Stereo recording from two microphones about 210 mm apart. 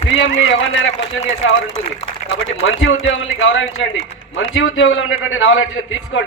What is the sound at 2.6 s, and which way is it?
A man's voice, 65° left (ahead or behind).